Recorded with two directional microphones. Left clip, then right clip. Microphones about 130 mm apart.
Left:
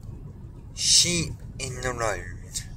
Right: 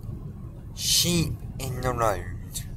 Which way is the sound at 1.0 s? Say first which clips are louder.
Left 1 dB; 20° right (ahead or behind).